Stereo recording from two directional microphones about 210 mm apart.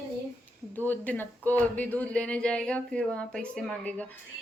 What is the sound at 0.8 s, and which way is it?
Speech, 10° left (ahead or behind).